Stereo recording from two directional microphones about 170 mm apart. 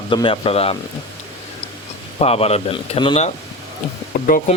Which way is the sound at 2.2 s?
35° left (ahead or behind).